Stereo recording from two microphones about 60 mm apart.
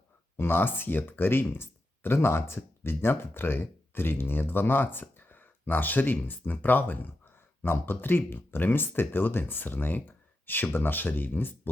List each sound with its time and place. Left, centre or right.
0.3 s speech: left